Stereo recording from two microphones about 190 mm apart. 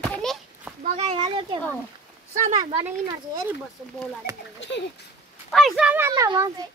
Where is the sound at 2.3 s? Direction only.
40° right (ahead or behind).